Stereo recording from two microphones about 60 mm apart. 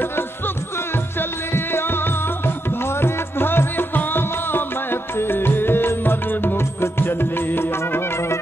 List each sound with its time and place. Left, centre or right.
1.5 s music: left
3.0 s music: left